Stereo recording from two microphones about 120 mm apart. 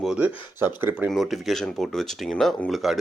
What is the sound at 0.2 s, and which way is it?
Speech, 15° right (ahead or behind).